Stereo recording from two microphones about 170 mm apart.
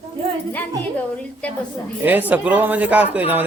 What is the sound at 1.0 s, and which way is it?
Speech, 5° left (ahead or behind).